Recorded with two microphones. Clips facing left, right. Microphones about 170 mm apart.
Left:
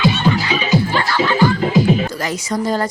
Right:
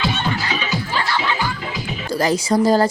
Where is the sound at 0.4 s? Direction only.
25° left (ahead or behind).